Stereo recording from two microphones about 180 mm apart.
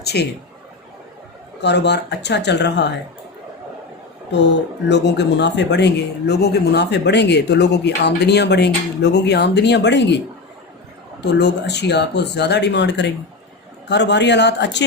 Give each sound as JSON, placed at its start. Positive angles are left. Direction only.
{"t": 0.0, "sound": "speech", "side_deg": 65}
{"t": 1.6, "sound": "speech", "side_deg": 70}
{"t": 4.9, "sound": "speech", "side_deg": 75}
{"t": 11.2, "sound": "speech", "side_deg": 70}